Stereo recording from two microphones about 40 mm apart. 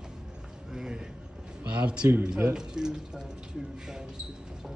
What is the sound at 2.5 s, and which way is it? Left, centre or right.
Speech, centre.